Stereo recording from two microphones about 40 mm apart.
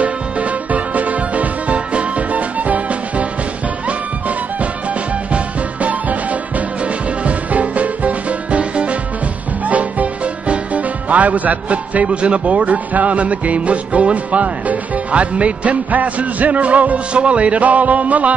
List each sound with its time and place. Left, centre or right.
0.0 s music: right
5.3 s music: right
7.2 s music: right
10.5 s a man's voice: right